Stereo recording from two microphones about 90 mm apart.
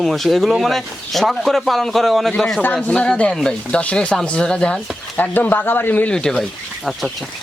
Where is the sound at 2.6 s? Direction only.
15° left (ahead or behind).